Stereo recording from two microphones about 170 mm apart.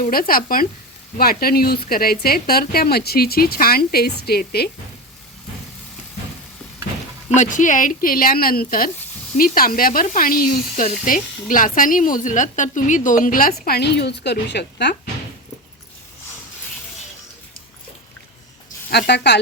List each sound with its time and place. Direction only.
0.0 s speech: 60° left (ahead or behind)
7.3 s speech: 50° left (ahead or behind)
13.7 s a woman's voice: 75° left (ahead or behind)
18.9 s a woman's voice: 75° left (ahead or behind)